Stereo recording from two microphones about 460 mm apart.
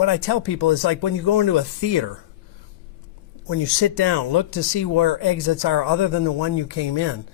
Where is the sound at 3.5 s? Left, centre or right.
Left.